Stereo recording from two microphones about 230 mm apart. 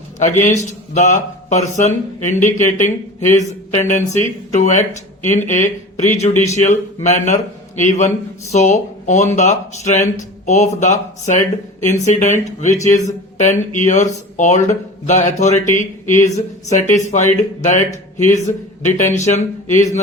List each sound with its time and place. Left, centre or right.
0.2 s speech: left